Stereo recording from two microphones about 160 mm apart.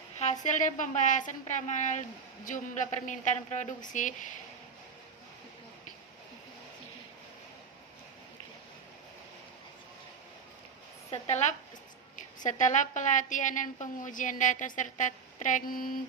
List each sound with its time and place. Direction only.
0.2 s a woman's voice: 45° left (ahead or behind)
11.1 s a woman's voice: 45° left (ahead or behind)
12.5 s a woman's voice: 50° left (ahead or behind)